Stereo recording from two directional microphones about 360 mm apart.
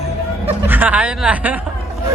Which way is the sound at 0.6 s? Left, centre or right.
Centre.